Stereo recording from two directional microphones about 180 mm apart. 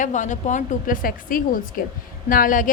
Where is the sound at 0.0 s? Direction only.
45° left (ahead or behind).